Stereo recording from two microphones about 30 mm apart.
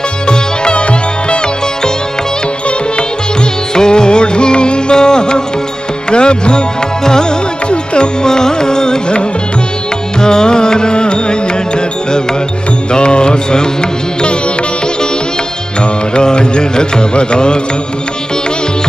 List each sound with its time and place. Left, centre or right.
0.3 s sitar: left
3.7 s music: left
7.1 s mantra: left
7.7 s music: left
8.3 s music: left
10.2 s music: left
12.9 s mantra: left
16.2 s music: left